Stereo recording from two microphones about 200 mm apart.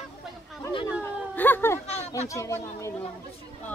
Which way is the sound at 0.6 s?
15° left (ahead or behind).